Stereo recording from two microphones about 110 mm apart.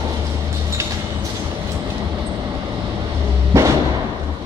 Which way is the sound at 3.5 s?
25° right (ahead or behind).